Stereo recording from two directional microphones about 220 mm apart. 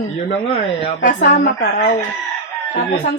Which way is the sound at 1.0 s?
35° left (ahead or behind).